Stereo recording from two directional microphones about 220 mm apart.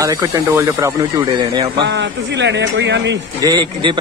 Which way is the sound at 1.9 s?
50° right (ahead or behind).